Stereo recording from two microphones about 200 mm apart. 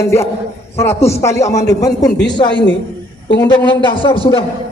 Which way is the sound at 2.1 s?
60° left (ahead or behind).